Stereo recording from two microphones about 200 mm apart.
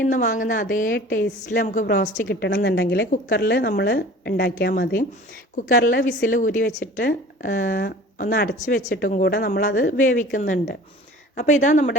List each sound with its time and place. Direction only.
0.0 s a woman's voice: 40° left (ahead or behind)
2.2 s a woman's voice: 60° left (ahead or behind)
5.5 s a woman's voice: 40° left (ahead or behind)